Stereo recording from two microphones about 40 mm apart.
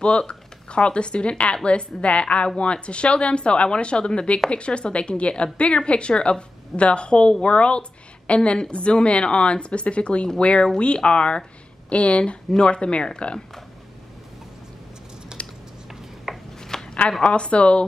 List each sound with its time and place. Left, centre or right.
0.0 s a woman's voice: left
15.4 s typing: left
16.5 s shuffling cards: centre
17.2 s a woman's voice: left